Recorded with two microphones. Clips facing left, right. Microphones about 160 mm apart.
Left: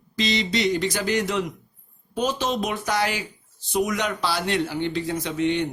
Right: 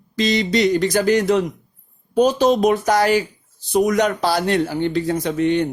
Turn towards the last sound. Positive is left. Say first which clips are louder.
# right 5 dB
turn(degrees=-45)  # may be behind; listen again after turning